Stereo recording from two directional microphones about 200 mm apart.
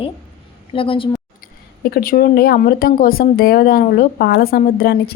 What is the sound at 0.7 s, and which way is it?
Speech, 25° left (ahead or behind).